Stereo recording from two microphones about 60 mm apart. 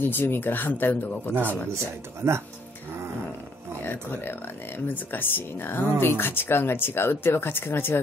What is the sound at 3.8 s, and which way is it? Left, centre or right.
Speech, left.